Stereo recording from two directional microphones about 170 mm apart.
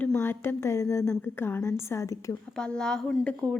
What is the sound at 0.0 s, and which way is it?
A woman's voice, 15° left (ahead or behind).